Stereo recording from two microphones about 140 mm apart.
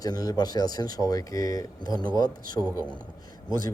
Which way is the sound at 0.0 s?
25° left (ahead or behind).